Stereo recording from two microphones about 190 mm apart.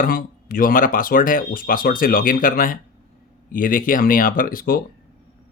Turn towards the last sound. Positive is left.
turn(degrees=50)  # may be behind; listen again after turning